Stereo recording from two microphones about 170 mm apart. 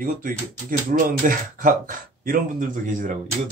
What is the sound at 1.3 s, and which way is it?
A man's voice, 55° right (ahead or behind).